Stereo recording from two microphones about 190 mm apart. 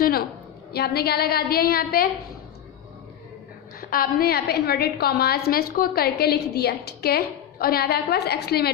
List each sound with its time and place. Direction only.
0.0 s a woman's voice: 50° left (ahead or behind)
3.8 s a woman's voice: 50° left (ahead or behind)